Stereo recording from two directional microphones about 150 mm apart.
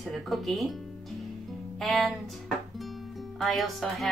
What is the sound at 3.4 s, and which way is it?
Music, centre (ahead or behind).